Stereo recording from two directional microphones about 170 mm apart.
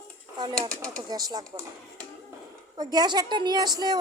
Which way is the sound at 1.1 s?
20° right (ahead or behind).